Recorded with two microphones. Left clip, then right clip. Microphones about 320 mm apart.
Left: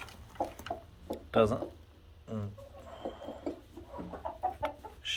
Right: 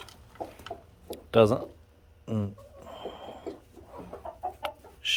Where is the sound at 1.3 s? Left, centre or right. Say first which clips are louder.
Right 6 dB; right.